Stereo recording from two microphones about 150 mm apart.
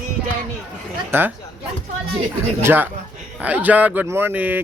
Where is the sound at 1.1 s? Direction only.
15° right (ahead or behind).